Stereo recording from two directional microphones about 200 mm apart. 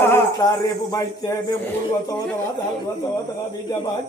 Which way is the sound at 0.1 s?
20° left (ahead or behind).